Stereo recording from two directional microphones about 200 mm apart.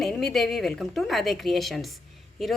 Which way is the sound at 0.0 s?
Centre (ahead or behind).